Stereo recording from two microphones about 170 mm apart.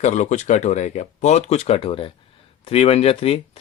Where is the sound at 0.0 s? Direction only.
45° left (ahead or behind).